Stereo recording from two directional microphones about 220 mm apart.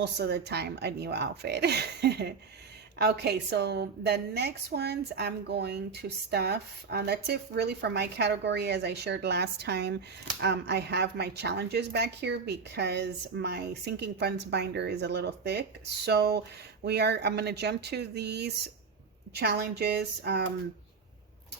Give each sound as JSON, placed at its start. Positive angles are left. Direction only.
{"t": 0.0, "sound": "a woman's voice", "side_deg": -50}